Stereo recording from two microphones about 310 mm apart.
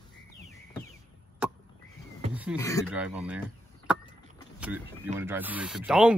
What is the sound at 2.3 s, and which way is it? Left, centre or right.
Beatboxing, centre.